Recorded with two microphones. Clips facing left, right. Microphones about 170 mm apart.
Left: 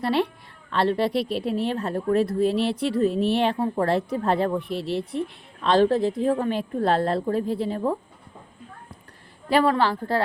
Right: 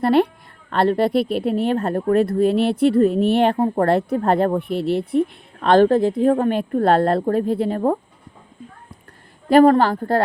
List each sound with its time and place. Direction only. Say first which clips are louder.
0.0 s speech: right 7 dB; 50° right (ahead or behind)
9.5 s speech: right 8 dB; 50° right (ahead or behind)